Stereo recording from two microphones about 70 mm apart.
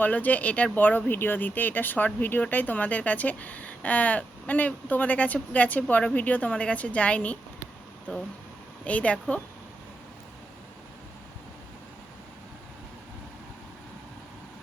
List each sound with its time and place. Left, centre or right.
0.0 s speech: left
8.8 s speech: centre